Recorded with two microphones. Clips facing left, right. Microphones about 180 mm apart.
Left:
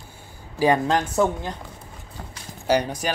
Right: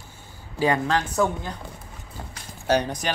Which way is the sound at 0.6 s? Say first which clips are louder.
Left 3 dB; 20° left (ahead or behind).